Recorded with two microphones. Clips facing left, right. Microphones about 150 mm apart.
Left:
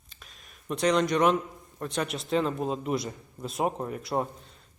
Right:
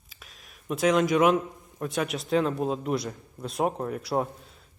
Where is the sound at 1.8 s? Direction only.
Centre (ahead or behind).